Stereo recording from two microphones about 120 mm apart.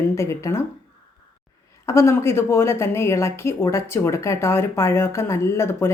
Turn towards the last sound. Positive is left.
turn(degrees=20)  # may be behind; listen again after turning